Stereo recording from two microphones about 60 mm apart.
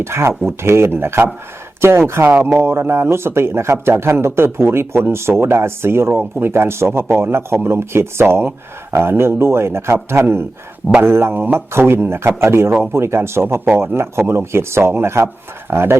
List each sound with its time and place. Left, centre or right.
0.0 s speech: right